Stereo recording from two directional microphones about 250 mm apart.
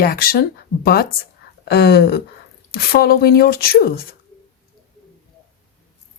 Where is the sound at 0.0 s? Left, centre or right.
Left.